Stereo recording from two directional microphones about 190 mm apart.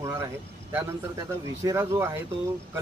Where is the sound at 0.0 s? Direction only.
15° right (ahead or behind).